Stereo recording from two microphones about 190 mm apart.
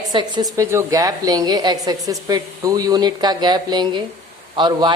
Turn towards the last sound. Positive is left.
turn(degrees=-25)  # may be behind; listen again after turning